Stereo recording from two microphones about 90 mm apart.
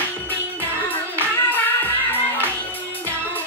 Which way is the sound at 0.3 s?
20° left (ahead or behind).